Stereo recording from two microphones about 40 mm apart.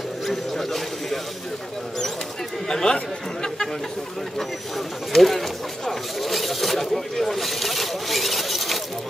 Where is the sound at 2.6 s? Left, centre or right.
Centre.